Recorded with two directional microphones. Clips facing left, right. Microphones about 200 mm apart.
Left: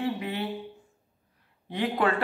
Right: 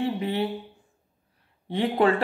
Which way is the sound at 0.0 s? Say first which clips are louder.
Right 4 dB; 30° right (ahead or behind).